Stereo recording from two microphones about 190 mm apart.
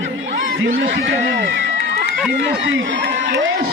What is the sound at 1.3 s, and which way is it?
Run, 75° right (ahead or behind).